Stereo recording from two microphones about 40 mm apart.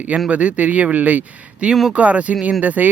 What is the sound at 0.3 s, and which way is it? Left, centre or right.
Speech, right.